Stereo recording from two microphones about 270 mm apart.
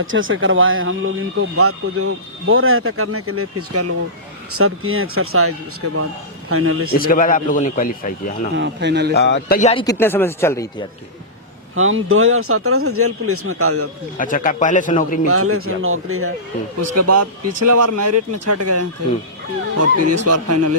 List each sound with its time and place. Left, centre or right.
0.0 s speech: right
7.0 s a man's voice: left
8.5 s a man's voice: right
9.1 s a man's voice: left
9.6 s a man's voice: left
9.8 s speech: centre
11.7 s speech: right
14.2 s a man's voice: left
15.3 s speech: right
16.8 s a man's voice: right
20.2 s speech: right